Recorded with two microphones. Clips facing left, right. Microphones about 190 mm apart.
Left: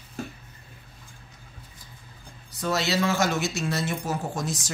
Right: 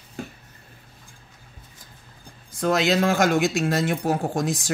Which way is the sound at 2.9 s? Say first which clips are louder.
Right 4 dB; 50° right (ahead or behind).